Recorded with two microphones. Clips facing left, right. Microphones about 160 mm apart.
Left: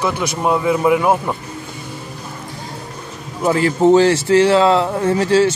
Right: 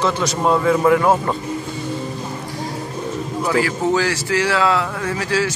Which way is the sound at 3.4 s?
25° left (ahead or behind).